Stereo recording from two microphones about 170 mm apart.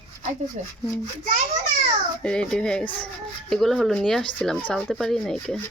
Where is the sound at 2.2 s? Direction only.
5° left (ahead or behind).